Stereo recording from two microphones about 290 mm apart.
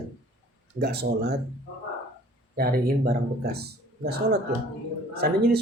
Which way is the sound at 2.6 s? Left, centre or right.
Right.